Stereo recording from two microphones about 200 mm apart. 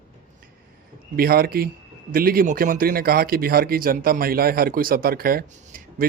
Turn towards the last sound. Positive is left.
turn(degrees=-45)  # may be behind; listen again after turning